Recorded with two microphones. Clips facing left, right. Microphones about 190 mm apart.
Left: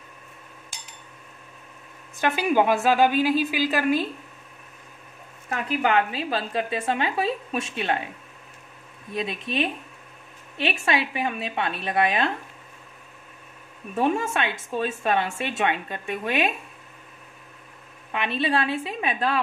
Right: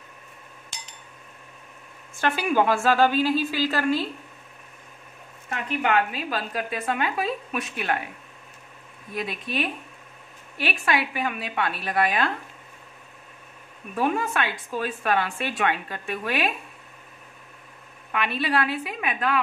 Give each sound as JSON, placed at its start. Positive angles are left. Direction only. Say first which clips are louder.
{"t": 0.7, "sound": "chink", "louder": "right 5 dB", "side_deg": 10}
{"t": 2.1, "sound": "a woman's voice", "louder": "left 1 dB", "side_deg": 15}
{"t": 5.8, "sound": "a woman's voice", "louder": "left 1 dB", "side_deg": 30}
{"t": 9.1, "sound": "a woman's voice", "louder": "left 2 dB", "side_deg": 25}
{"t": 13.9, "sound": "a woman's voice", "louder": "left 1 dB", "side_deg": 25}
{"t": 18.1, "sound": "a woman's voice", "louder": "left 1 dB", "side_deg": 25}